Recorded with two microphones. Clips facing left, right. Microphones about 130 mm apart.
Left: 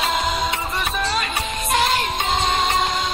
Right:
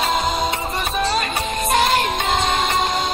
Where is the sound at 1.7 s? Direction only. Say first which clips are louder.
Right 2 dB; 50° right (ahead or behind).